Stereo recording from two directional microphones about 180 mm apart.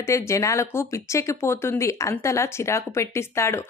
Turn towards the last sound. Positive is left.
turn(degrees=15)  # may be behind; listen again after turning